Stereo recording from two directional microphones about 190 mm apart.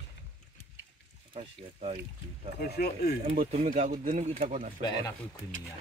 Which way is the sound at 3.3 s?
30° right (ahead or behind).